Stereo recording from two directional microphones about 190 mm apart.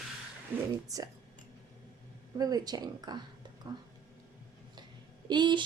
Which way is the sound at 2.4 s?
20° right (ahead or behind).